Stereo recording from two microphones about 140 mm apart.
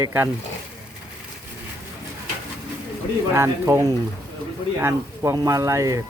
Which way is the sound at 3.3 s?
20° right (ahead or behind).